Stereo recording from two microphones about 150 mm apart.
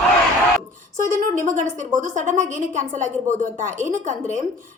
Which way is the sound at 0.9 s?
60° right (ahead or behind).